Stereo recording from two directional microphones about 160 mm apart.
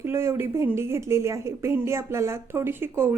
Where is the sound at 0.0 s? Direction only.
15° right (ahead or behind).